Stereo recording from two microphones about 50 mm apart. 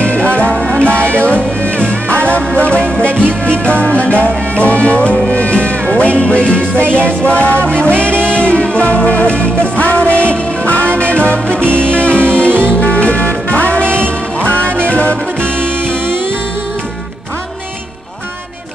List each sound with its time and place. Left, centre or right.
0.0 s music: left
11.4 s music: right
11.8 s music: left
13.8 s music: right
14.4 s music: left